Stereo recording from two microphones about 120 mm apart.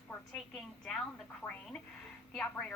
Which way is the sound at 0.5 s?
5° left (ahead or behind).